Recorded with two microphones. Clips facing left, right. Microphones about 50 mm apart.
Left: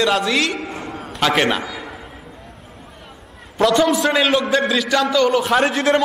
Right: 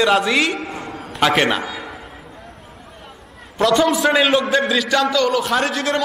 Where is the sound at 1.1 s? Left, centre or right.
Centre.